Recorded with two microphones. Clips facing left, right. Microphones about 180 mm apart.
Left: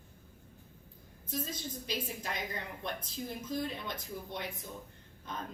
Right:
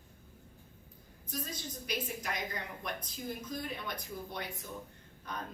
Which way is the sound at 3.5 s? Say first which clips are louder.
Left 3 dB; 25° left (ahead or behind).